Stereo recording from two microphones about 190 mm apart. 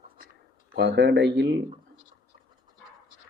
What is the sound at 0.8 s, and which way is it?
Speech, 65° right (ahead or behind).